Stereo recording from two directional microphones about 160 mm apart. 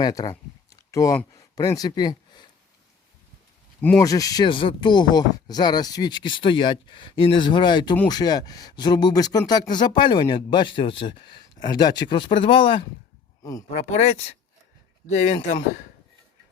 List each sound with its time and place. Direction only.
0.0 s speech: 25° left (ahead or behind)
3.8 s speech: 10° left (ahead or behind)
4.0 s speech: 20° left (ahead or behind)
13.9 s speech: 40° left (ahead or behind)